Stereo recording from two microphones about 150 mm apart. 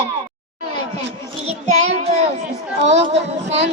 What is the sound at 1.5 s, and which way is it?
A child's voice, 45° right (ahead or behind).